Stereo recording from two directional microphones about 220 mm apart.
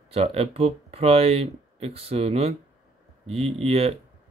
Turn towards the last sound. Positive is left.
turn(degrees=-25)  # may be behind; listen again after turning